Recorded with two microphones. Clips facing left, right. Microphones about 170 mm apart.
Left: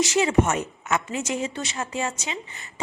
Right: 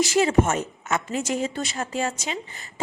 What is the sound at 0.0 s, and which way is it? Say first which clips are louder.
A woman's voice: right 1 dB; 35° right (ahead or behind).